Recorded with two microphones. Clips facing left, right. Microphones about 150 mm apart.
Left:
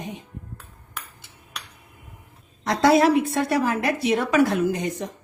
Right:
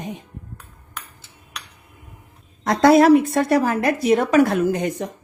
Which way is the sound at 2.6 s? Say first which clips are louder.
Right 4 dB; 50° right (ahead or behind).